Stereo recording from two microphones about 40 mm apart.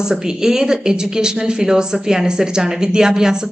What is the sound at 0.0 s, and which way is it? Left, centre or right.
Speech, centre.